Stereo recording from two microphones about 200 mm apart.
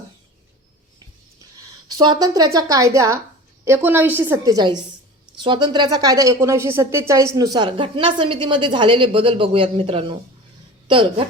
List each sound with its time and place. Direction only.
1.9 s a woman's voice: 20° right (ahead or behind)